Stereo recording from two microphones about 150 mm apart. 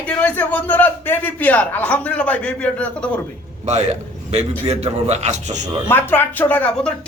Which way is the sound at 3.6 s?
50° right (ahead or behind).